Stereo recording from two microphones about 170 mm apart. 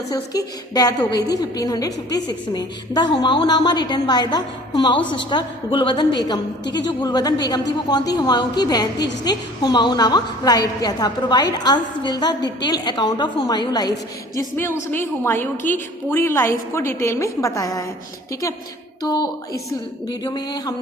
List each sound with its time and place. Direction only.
0.1 s a woman's voice: 20° left (ahead or behind)
19.0 s a woman's voice: 25° left (ahead or behind)